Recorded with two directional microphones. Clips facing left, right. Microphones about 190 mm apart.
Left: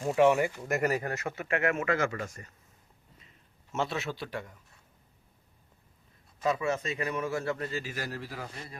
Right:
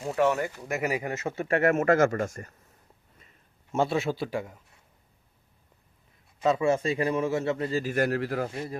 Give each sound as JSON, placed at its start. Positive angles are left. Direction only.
{"t": 0.0, "sound": "speech", "side_deg": 0}
{"t": 0.9, "sound": "a man's voice", "side_deg": -15}
{"t": 1.5, "sound": "speech", "side_deg": -40}
{"t": 3.7, "sound": "a man's voice", "side_deg": -30}
{"t": 6.4, "sound": "a man's voice", "side_deg": -25}
{"t": 7.8, "sound": "speech", "side_deg": -55}